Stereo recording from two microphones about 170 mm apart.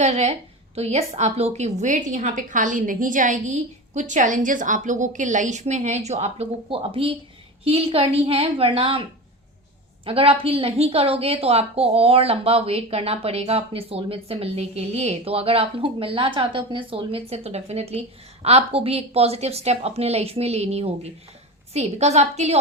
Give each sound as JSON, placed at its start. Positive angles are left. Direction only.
{"t": 0.0, "sound": "a woman's voice", "side_deg": -40}
{"t": 10.1, "sound": "a woman's voice", "side_deg": -35}